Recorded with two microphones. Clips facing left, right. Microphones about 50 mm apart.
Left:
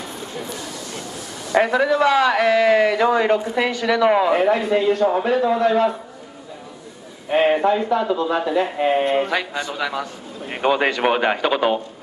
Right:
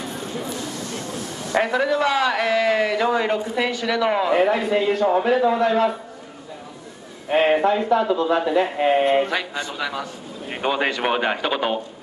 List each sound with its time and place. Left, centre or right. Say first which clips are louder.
1.5 s a man's voice: left 3 dB; centre
4.4 s speech: left 1 dB; centre
7.2 s speech: left 1 dB; centre
9.5 s a man's voice: left 2 dB; left
9.8 s a man's voice: left 3 dB; centre
10.5 s a sound: left 4 dB; centre
11.0 s speech: left 3 dB; centre